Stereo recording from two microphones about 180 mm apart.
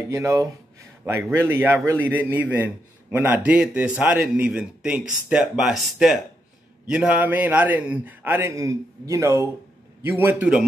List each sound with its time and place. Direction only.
0.1 s a man's voice: 15° right (ahead or behind)